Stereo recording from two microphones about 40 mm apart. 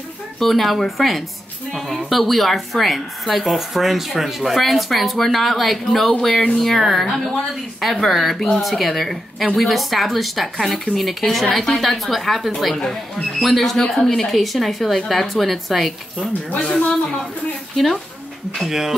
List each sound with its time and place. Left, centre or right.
0.4 s a woman's voice: centre
16.5 s a woman's voice: left
18.7 s speech: centre